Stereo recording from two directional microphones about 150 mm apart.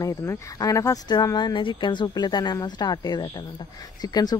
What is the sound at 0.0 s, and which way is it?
Speech, 20° left (ahead or behind).